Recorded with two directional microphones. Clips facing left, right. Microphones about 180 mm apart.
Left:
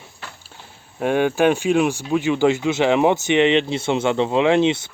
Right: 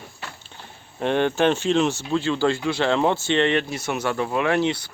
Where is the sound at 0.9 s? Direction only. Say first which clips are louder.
Left 3 dB; 10° left (ahead or behind).